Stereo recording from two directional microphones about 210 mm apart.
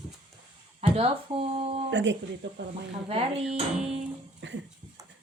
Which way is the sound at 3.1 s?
30° right (ahead or behind).